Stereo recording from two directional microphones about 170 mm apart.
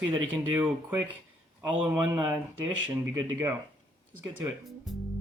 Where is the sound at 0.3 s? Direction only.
10° right (ahead or behind).